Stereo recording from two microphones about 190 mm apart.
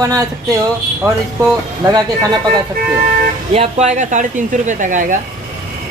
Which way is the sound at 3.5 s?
35° right (ahead or behind).